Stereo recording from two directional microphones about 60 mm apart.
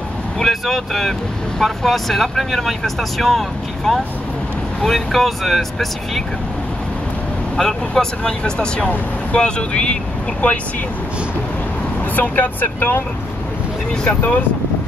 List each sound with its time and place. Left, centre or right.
0.4 s speech: centre
7.5 s speech: centre; by 10.6 s left
12.2 s speech: left